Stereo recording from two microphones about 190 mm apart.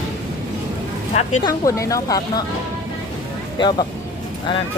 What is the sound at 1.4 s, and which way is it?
Speech, 15° left (ahead or behind).